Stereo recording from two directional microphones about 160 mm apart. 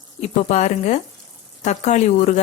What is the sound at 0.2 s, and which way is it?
Speech, 45° left (ahead or behind).